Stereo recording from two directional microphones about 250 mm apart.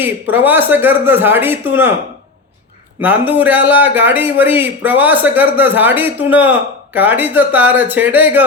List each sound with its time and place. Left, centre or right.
0.0 s a man's voice: centre
3.0 s a man's voice: centre